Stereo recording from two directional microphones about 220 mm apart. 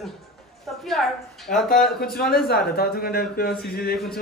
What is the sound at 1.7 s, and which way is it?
A man's voice, 45° left (ahead or behind).